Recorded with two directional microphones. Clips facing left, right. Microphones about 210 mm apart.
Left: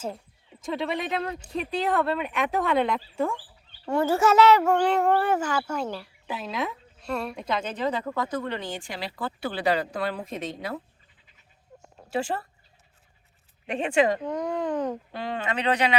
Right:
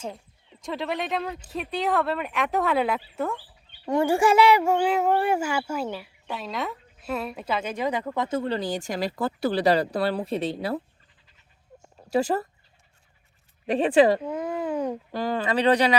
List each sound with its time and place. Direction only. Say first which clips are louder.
0.6 s speech: left 1 dB; centre (ahead or behind)
3.8 s speech: right 1 dB; 15° right (ahead or behind); by 10.8 s 35° right (ahead or behind)
12.1 s speech: right 5 dB; 40° right (ahead or behind)
13.7 s speech: right 5 dB; 35° right (ahead or behind)
14.2 s speech: left 1 dB; 5° right (ahead or behind)
15.1 s speech: right 5 dB; 40° right (ahead or behind)